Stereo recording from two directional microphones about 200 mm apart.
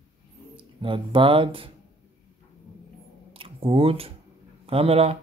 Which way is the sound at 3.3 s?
25° right (ahead or behind).